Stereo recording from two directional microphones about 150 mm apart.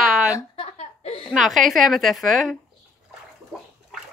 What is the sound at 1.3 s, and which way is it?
A woman's voice, centre (ahead or behind).